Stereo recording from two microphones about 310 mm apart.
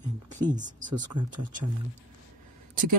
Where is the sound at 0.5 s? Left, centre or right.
Right.